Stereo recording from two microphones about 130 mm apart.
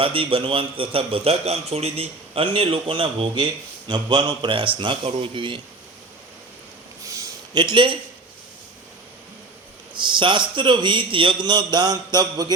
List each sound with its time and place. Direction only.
0.0 s a man's voice: 45° right (ahead or behind)
7.0 s a sound: 25° right (ahead or behind)
9.9 s a man's voice: 40° right (ahead or behind)